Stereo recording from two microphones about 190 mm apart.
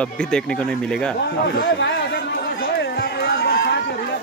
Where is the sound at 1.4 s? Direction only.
60° left (ahead or behind).